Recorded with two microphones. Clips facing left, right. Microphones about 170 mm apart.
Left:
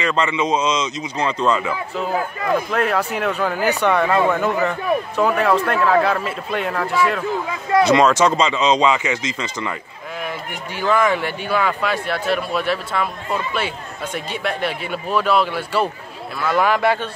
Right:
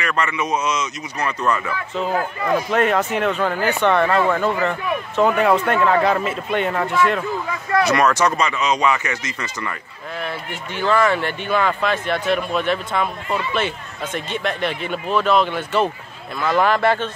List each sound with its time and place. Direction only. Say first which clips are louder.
0.0 s speech: left 3 dB; 20° left (ahead or behind)
2.5 s a man's voice: right 1 dB; centre (ahead or behind)
5.2 s a man's voice: right 3 dB; centre (ahead or behind)
7.2 s speech: left 2 dB; 20° left (ahead or behind)